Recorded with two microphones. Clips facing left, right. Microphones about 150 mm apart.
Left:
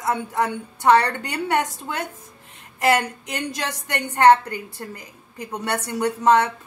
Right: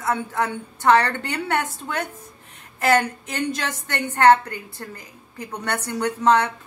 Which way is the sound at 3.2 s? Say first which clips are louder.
Right 2 dB; 15° left (ahead or behind).